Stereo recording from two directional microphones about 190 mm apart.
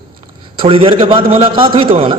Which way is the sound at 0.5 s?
30° right (ahead or behind).